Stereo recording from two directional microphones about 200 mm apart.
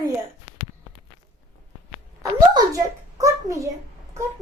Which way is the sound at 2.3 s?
15° right (ahead or behind).